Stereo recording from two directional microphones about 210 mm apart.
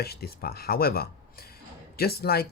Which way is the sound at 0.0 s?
50° left (ahead or behind).